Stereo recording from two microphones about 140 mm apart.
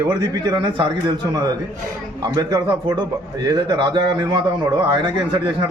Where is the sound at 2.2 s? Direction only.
30° right (ahead or behind).